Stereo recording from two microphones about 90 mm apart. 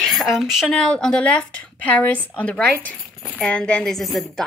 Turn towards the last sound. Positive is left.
turn(degrees=0)  # may be behind; listen again after turning